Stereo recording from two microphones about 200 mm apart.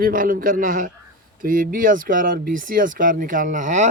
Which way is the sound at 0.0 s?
45° right (ahead or behind).